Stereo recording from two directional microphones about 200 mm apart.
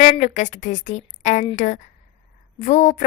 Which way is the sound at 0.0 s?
40° left (ahead or behind).